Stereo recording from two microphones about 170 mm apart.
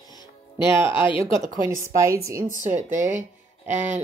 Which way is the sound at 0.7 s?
30° left (ahead or behind).